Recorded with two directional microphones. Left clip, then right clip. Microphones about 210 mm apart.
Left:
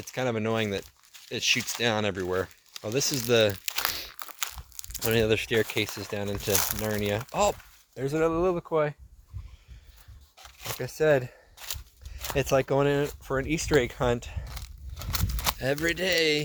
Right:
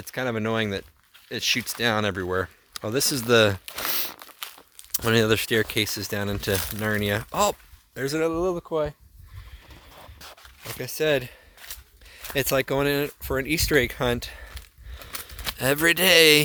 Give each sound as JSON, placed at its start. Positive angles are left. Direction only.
{"t": 0.0, "sound": "speech", "side_deg": -35}
{"t": 3.7, "sound": "crumpling", "side_deg": 50}
{"t": 5.0, "sound": "speech", "side_deg": -45}
{"t": 10.8, "sound": "speech", "side_deg": -30}
{"t": 14.5, "sound": "a sound", "side_deg": 45}
{"t": 15.5, "sound": "speech", "side_deg": -50}